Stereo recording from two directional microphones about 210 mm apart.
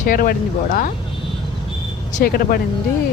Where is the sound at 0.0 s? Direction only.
40° left (ahead or behind).